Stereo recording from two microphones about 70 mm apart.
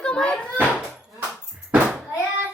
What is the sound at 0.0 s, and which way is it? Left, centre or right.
Cupboard open or close, centre.